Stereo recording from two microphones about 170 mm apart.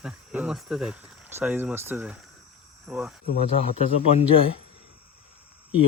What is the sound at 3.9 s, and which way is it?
Speech, 35° left (ahead or behind).